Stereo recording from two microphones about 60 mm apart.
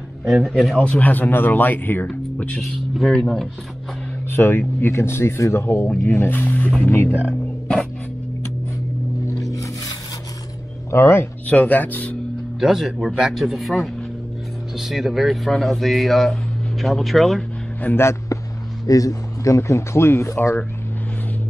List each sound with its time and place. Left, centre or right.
0.2 s speech: centre
0.7 s speech: left
2.6 s speech: centre
4.3 s speech: left
9.4 s music: left
10.9 s speech: left
11.4 s speech: left
12.5 s speech: centre
17.8 s speech: left
18.3 s a sound: left
18.9 s speech: left